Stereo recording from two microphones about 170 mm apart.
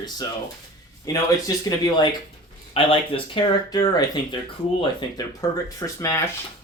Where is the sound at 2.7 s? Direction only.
35° left (ahead or behind).